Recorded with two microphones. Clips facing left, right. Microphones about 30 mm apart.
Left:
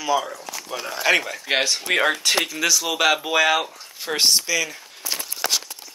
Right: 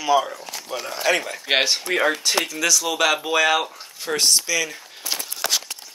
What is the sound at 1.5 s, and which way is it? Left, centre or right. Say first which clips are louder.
Speech: right 2 dB; right.